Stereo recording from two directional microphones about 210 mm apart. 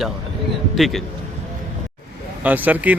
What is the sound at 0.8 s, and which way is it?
Speech, centre (ahead or behind).